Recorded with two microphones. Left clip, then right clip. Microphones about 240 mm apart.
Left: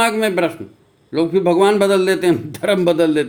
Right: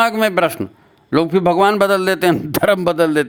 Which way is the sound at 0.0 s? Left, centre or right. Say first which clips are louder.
Right 2 dB; right.